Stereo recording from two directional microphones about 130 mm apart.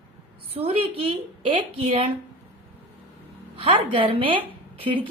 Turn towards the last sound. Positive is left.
turn(degrees=-45)  # may be behind; listen again after turning